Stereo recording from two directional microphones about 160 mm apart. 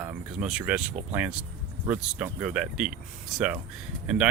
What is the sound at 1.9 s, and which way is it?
Speech, 10° right (ahead or behind).